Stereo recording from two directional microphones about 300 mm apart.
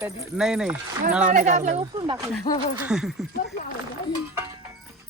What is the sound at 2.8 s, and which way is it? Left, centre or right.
Speech, centre.